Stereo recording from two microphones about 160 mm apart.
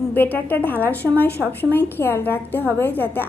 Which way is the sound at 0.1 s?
10° left (ahead or behind).